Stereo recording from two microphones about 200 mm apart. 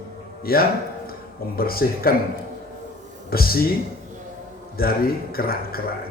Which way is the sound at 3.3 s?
50° left (ahead or behind).